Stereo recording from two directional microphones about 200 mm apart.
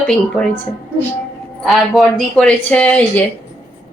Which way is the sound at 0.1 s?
5° left (ahead or behind).